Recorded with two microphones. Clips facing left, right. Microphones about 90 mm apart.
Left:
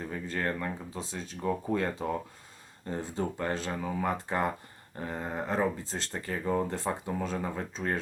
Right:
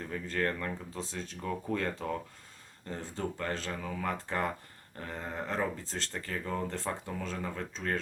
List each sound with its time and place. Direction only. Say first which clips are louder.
0.0 s speech: even; 10° left (ahead or behind)